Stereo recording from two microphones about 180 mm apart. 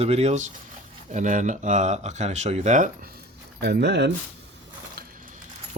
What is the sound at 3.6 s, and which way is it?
Speech, 65° right (ahead or behind).